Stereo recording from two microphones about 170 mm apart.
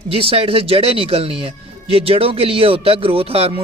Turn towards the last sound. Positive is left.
turn(degrees=-35)  # may be behind; listen again after turning